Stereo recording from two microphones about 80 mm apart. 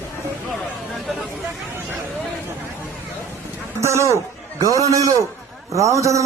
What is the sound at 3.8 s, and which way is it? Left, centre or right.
A man's voice, right.